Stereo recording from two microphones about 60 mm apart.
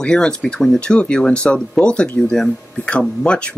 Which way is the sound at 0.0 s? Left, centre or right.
Centre.